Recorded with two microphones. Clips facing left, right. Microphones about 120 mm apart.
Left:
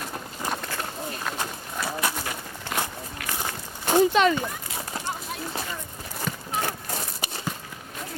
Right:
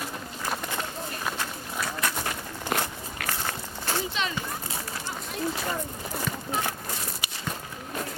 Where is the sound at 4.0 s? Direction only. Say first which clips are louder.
Left 16 dB; 55° left (ahead or behind).